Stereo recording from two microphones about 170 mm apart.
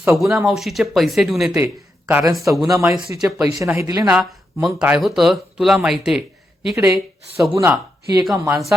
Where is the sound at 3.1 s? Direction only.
15° right (ahead or behind).